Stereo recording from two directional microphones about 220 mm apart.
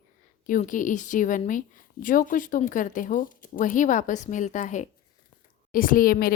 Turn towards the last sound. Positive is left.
turn(degrees=40)  # may be behind; listen again after turning